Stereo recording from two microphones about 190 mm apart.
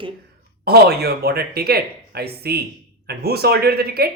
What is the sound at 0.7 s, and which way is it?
Speech, 55° right (ahead or behind).